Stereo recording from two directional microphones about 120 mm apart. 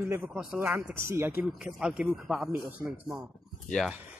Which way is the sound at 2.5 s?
15° right (ahead or behind).